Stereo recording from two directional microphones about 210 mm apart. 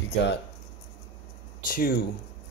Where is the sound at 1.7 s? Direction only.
45° left (ahead or behind).